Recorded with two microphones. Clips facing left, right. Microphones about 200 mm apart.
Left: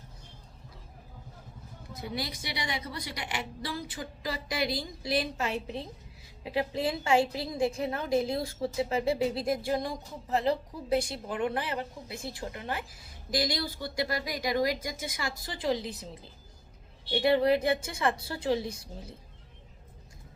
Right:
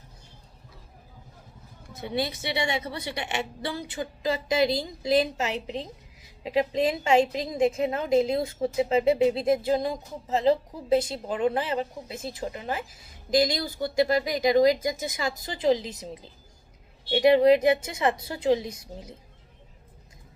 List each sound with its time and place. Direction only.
2.0 s a woman's voice: 25° right (ahead or behind)
5.2 s a woman's voice: 90° right
5.5 s a woman's voice: 20° right (ahead or behind)